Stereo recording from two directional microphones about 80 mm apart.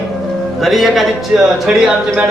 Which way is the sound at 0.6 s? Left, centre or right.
Centre.